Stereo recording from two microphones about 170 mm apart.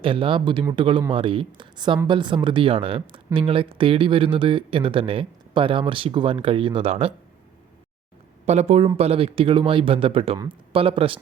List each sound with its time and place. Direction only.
0.0 s speech: 30° right (ahead or behind)
8.4 s speech: 40° right (ahead or behind)
10.3 s speech: 20° right (ahead or behind)
10.8 s speech: 35° right (ahead or behind)